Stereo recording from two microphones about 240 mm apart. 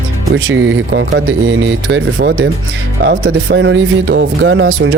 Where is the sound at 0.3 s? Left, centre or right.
Right.